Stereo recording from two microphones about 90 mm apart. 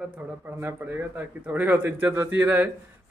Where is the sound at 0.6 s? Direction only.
20° right (ahead or behind).